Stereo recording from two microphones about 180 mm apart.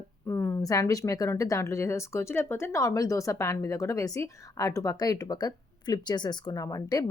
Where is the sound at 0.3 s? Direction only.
15° left (ahead or behind).